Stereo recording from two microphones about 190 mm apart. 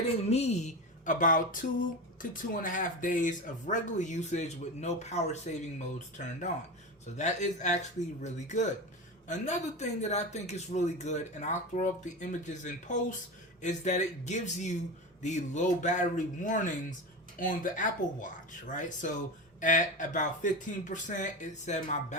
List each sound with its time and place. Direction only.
0.3 s speech: 35° left (ahead or behind)